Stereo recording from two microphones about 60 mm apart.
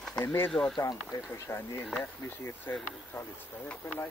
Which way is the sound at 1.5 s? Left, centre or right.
Left.